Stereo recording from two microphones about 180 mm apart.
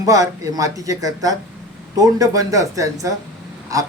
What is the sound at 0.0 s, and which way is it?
Speech, 20° right (ahead or behind).